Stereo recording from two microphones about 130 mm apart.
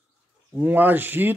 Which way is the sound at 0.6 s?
15° right (ahead or behind).